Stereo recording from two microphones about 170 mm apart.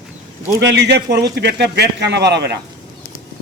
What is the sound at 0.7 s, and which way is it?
Speech, 80° right.